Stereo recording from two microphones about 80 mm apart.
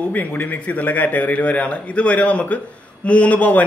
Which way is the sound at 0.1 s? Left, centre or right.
Left.